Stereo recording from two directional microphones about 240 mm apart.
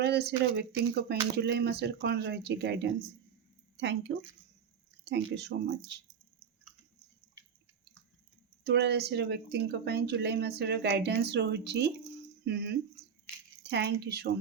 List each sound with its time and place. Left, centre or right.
0.0 s speech: right
8.6 s speech: right